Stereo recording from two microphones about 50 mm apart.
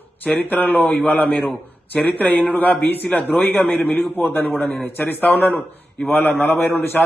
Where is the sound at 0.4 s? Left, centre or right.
Left.